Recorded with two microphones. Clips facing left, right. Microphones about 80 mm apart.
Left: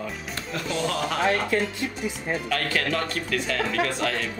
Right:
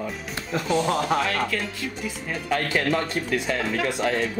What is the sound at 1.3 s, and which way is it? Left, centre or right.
Speech, left.